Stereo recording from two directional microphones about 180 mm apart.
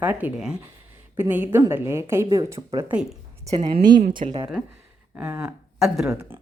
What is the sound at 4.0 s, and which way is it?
Speech, 45° right (ahead or behind).